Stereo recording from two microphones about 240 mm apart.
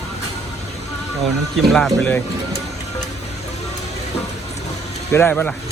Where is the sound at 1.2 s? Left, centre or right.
Centre.